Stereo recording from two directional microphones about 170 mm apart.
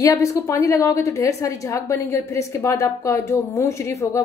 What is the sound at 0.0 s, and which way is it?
A woman's voice, 20° left (ahead or behind).